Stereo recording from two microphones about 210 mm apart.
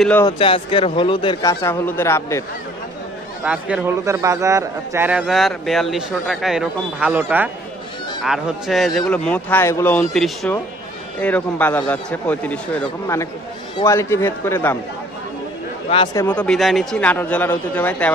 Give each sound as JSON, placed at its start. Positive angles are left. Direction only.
{"t": 0.2, "sound": "a man's voice", "side_deg": 25}
{"t": 3.4, "sound": "a man's voice", "side_deg": -5}
{"t": 15.9, "sound": "speech", "side_deg": 25}
{"t": 16.2, "sound": "a man's voice", "side_deg": 5}